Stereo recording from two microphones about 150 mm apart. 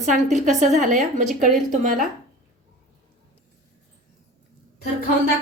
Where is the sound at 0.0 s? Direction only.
50° right (ahead or behind).